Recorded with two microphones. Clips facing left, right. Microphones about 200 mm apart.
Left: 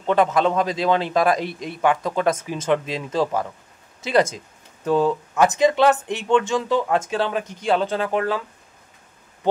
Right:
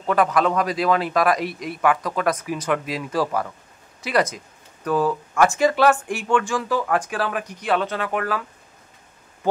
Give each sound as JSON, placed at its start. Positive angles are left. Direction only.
{"t": 0.0, "sound": "speech", "side_deg": 25}